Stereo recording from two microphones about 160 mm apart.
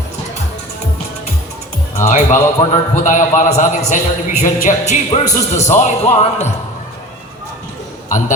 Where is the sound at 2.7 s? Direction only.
50° left (ahead or behind).